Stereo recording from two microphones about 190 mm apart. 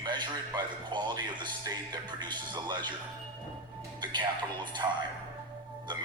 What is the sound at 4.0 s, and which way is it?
Speech, 25° right (ahead or behind).